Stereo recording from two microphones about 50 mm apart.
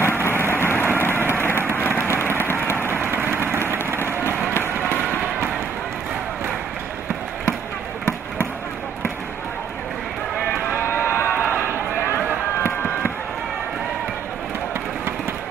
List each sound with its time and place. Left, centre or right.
0.0 s vehicle: left
1.4 s a sound: left
3.1 s vehicle: right
10.7 s run: left
12.5 s fireworks: left